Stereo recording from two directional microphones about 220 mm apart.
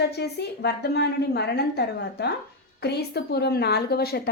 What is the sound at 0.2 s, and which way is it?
A woman's voice, 50° left (ahead or behind).